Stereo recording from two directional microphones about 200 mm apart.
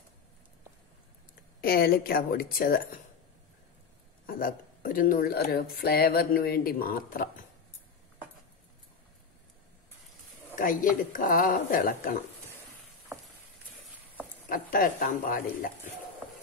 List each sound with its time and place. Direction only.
1.6 s speech: 50° left (ahead or behind)
4.3 s speech: 45° left (ahead or behind)
10.5 s speech: 45° left (ahead or behind)
14.5 s speech: 45° left (ahead or behind)